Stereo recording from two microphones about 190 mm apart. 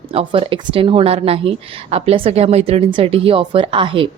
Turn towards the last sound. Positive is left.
turn(degrees=-25)  # may be behind; listen again after turning